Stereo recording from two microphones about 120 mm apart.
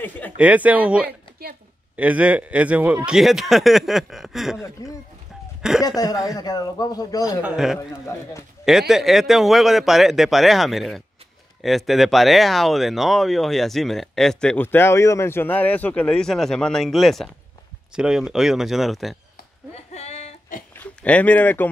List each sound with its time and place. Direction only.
0.4 s a man's voice: 10° right (ahead or behind)
4.8 s speech: 25° left (ahead or behind)
7.2 s speech: 5° right (ahead or behind)
7.9 s speech: 25° left (ahead or behind)
8.6 s speech: centre (ahead or behind)
14.6 s speech: 15° left (ahead or behind); by 19.1 s centre (ahead or behind)
19.7 s a sound: 65° left (ahead or behind); by 20.6 s 80° left
20.7 s speech: 10° left (ahead or behind)